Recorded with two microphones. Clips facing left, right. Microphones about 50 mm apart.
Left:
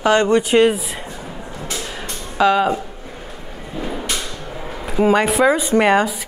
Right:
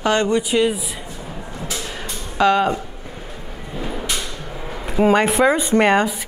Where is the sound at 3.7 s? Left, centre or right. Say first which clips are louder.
Left 1 dB; centre.